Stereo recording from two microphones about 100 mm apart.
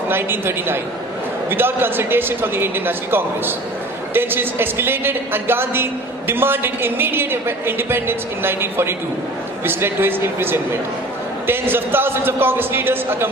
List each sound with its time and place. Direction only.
0.1 s a woman's voice: 20° right (ahead or behind)